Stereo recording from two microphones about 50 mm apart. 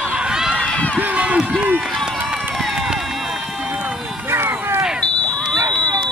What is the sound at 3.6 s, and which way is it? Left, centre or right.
Run, right.